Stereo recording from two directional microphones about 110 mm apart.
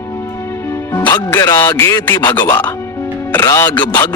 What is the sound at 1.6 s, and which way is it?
Music, 30° left (ahead or behind).